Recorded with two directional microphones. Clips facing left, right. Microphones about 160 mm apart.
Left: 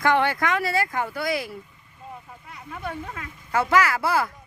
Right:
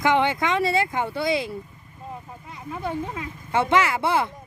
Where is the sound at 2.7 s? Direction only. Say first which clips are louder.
Right 4 dB; 20° right (ahead or behind).